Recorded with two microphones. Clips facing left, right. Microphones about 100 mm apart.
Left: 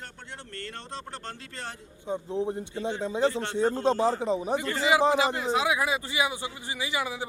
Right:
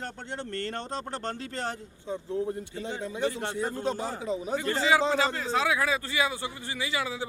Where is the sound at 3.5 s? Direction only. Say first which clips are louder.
Left 6 dB; 25° left (ahead or behind).